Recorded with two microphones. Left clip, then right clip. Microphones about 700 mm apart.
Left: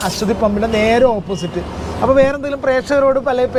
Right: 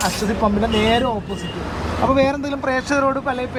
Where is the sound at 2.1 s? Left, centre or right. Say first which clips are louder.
Left 5 dB; centre.